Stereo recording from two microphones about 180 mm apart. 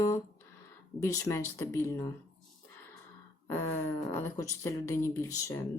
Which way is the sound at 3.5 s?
15° left (ahead or behind).